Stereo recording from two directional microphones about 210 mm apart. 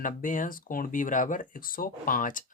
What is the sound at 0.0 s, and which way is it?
Speech, 40° left (ahead or behind).